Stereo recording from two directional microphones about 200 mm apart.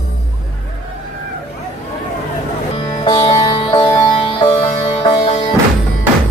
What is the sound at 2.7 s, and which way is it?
Music, 25° left (ahead or behind).